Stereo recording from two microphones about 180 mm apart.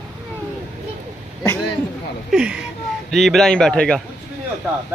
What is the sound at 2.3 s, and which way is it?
Speech, 5° right (ahead or behind).